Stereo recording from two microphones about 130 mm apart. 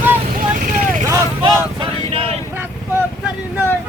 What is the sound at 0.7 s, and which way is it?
Vehicle, 90° right.